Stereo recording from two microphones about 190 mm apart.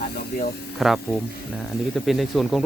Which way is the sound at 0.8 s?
Centre (ahead or behind).